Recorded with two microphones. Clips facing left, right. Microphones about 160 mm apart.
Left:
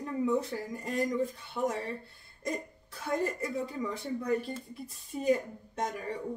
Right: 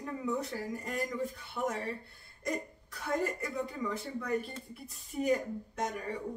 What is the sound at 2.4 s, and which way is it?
Speech, 30° left (ahead or behind).